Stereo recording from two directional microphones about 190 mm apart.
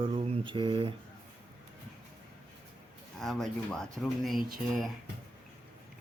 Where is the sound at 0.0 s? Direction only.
30° right (ahead or behind).